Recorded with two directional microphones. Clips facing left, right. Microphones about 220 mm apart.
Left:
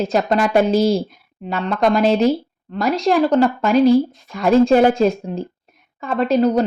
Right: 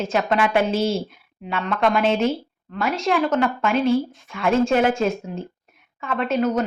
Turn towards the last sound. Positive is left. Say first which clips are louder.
# left 5 dB
turn(degrees=35)  # may be behind; listen again after turning